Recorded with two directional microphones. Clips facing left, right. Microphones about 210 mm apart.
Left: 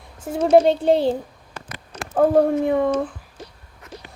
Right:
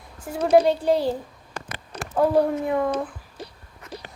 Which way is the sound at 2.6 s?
30° left (ahead or behind).